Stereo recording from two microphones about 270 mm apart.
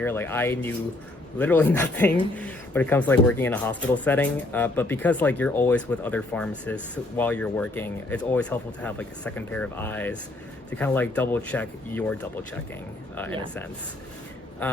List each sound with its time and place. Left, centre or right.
0.0 s speech: centre